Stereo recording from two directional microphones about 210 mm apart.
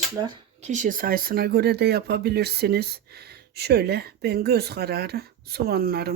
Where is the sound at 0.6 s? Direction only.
35° right (ahead or behind).